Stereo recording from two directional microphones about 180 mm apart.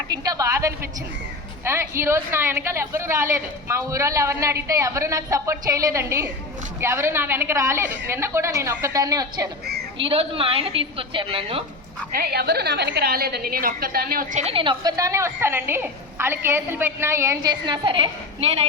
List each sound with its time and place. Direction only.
0.1 s a woman's voice: 20° right (ahead or behind)
10.0 s a woman's voice: 30° right (ahead or behind)
12.1 s a woman's voice: 60° right (ahead or behind); by 18.6 s 30° right (ahead or behind)